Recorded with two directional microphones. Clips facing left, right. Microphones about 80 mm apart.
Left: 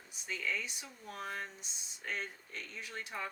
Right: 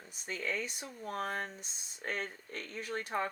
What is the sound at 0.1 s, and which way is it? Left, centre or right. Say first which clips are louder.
Speech: right 1 dB; right.